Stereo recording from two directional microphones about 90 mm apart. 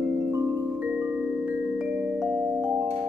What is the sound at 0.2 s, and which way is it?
Music, 35° right (ahead or behind).